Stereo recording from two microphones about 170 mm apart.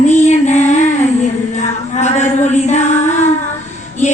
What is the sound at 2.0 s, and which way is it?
Female singing, 45° left (ahead or behind).